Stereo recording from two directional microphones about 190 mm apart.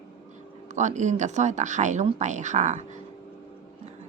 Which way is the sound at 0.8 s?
40° right (ahead or behind).